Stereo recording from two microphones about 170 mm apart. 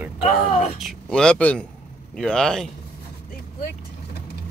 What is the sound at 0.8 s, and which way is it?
Speech, 5° left (ahead or behind).